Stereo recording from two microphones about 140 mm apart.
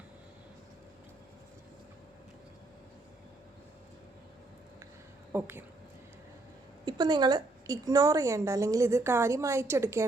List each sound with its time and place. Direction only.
5.3 s speech: 15° right (ahead or behind)
6.8 s a woman's voice: 30° right (ahead or behind)